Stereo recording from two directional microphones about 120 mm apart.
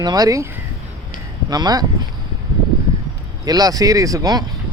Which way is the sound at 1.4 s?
35° right (ahead or behind).